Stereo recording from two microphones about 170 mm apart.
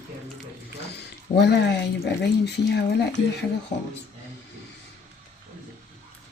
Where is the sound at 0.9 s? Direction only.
80° left.